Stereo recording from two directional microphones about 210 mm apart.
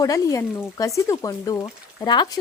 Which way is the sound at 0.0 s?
15° left (ahead or behind).